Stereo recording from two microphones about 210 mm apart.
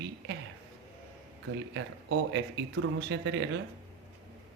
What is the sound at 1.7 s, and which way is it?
Speech, 60° right (ahead or behind).